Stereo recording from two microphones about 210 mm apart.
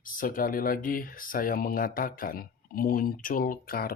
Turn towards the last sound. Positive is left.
turn(degrees=45)  # may be behind; listen again after turning